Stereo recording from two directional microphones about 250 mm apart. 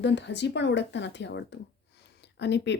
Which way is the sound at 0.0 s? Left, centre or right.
Left.